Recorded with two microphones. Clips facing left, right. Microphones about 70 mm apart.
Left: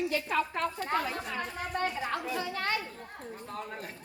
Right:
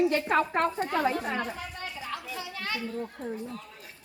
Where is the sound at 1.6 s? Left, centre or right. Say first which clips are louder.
Left 6 dB; left.